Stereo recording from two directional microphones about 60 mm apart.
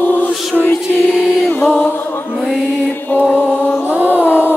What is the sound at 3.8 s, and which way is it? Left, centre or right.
Music, right.